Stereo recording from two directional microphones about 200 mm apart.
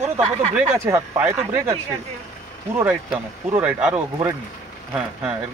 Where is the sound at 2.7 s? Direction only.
10° right (ahead or behind).